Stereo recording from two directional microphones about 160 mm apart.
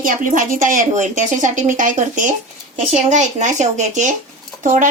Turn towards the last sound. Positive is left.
turn(degrees=-55)  # may be behind; listen again after turning